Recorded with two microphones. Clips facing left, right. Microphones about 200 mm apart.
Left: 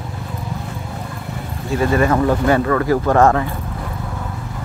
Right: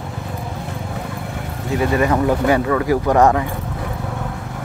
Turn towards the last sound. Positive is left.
turn(degrees=-15)  # may be behind; listen again after turning